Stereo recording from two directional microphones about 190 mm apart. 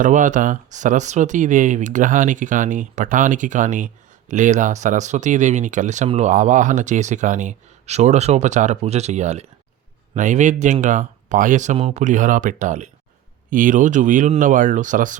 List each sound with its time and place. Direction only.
0.0 s speech: 40° right (ahead or behind)